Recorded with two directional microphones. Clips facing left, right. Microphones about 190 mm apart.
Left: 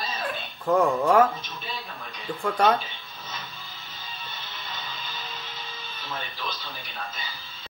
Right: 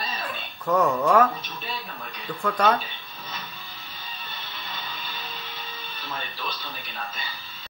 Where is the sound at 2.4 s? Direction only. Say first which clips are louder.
Even; 30° left (ahead or behind).